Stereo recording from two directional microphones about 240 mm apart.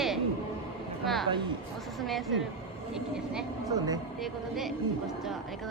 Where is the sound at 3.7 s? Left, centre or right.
Centre.